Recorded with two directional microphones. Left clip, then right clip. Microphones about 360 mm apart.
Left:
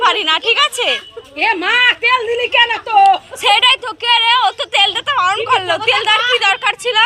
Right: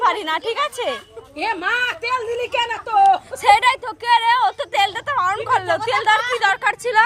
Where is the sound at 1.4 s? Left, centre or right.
Right.